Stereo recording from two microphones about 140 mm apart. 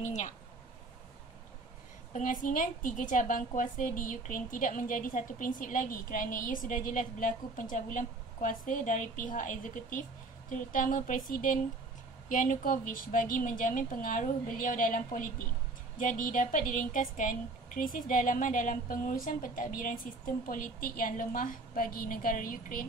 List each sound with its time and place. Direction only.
0.0 s speech: 55° left (ahead or behind)
2.1 s a woman's voice: 70° left (ahead or behind); by 22.8 s 90° left